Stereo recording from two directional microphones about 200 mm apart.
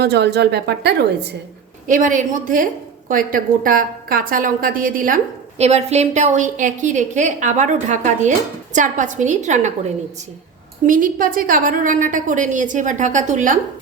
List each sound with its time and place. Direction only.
0.0 s a woman's voice: 55° right (ahead or behind)
1.9 s a woman's voice: 40° right (ahead or behind)
10.8 s a woman's voice: 45° right (ahead or behind)